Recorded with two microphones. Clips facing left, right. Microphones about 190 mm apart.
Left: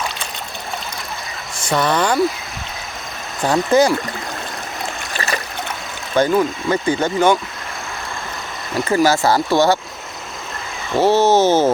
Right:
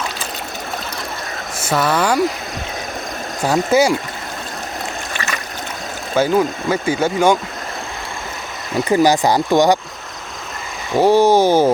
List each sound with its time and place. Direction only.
1.5 s speech: 5° right (ahead or behind)
3.4 s speech: 10° right (ahead or behind)
5.1 s stream: 35° left (ahead or behind)
6.1 s speech: 10° right (ahead or behind)
8.8 s speech: 15° right (ahead or behind)
10.9 s speech: 15° right (ahead or behind)